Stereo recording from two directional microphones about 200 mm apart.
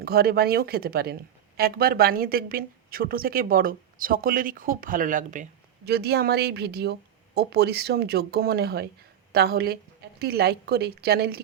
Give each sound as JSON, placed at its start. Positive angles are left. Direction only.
{"t": 0.0, "sound": "a woman's voice", "side_deg": -50}